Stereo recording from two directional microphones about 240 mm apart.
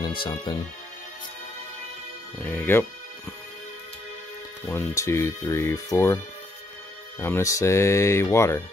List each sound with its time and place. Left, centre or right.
0.0 s speech: centre
2.4 s speech: centre
4.6 s speech: centre
7.2 s speech: centre